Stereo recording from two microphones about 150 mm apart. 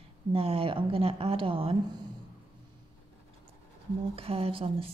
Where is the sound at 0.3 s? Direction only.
40° right (ahead or behind).